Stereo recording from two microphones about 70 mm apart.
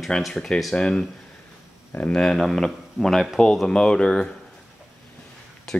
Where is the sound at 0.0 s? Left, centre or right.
Centre.